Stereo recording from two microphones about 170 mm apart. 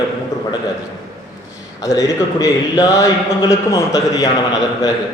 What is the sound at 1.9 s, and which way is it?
A man's voice, 20° left (ahead or behind).